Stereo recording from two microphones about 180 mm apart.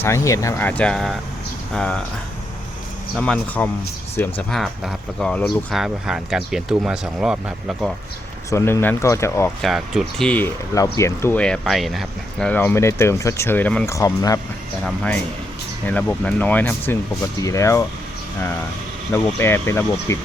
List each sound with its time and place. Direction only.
0.0 s speech: 15° left (ahead or behind)
3.2 s speech: 5° left (ahead or behind)
8.4 s speech: 15° left (ahead or behind)
9.6 s speech: centre (ahead or behind); by 14.3 s 20° left (ahead or behind)
14.8 s speech: 5° left (ahead or behind)
19.1 s speech: 15° left (ahead or behind)